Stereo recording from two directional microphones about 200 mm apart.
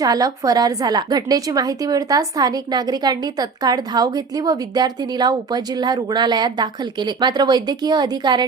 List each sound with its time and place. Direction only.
0.0 s a woman's voice: 20° right (ahead or behind)